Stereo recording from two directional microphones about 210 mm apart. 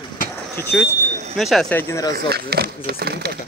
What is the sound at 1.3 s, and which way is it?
Speech, centre (ahead or behind).